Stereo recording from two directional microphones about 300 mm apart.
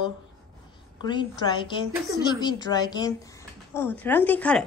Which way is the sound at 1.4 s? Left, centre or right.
Centre.